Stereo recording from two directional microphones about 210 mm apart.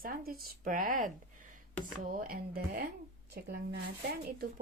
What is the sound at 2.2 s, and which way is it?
Speech, 45° right (ahead or behind).